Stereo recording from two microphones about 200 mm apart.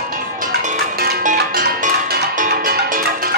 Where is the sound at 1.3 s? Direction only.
50° right (ahead or behind).